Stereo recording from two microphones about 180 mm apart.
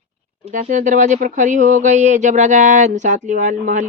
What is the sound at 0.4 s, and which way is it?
Speech, 40° right (ahead or behind).